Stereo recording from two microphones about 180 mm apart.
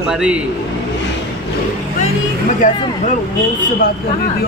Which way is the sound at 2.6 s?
45° left (ahead or behind).